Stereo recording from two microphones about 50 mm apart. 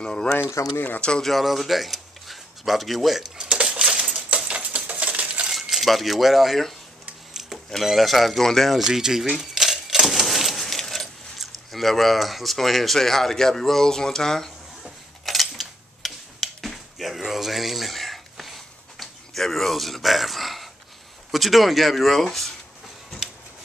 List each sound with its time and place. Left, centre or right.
0.0 s speech: centre
0.7 s speech: left
1.2 s speech: centre
3.3 s cutlery: centre
3.8 s coin: centre
5.5 s speech: centre
8.8 s speech: centre
14.8 s a sound: centre
21.3 s speech: centre